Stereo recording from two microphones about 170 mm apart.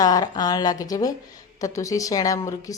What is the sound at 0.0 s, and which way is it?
A woman's voice, 20° left (ahead or behind).